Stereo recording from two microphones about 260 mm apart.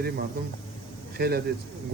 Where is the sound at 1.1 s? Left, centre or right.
Right.